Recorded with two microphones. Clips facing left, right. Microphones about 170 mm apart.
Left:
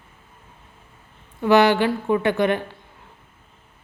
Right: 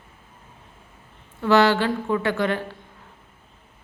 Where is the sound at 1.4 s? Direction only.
15° left (ahead or behind).